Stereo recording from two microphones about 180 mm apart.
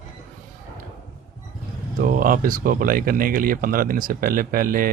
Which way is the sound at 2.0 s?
50° right (ahead or behind).